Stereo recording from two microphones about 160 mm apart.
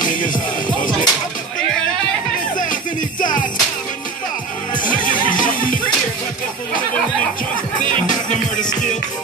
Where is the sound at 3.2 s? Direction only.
55° left (ahead or behind).